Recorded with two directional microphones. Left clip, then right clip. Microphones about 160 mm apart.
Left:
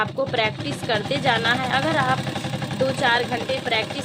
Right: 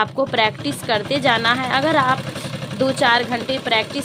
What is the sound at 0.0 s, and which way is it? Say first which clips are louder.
A woman's voice: right 4 dB; 50° right (ahead or behind).